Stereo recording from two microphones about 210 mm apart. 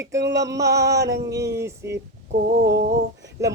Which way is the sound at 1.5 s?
15° right (ahead or behind).